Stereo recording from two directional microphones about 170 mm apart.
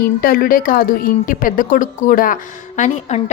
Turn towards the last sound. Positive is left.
turn(degrees=40)  # may be behind; listen again after turning